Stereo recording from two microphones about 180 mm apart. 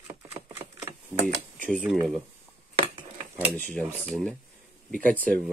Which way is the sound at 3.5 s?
10° left (ahead or behind).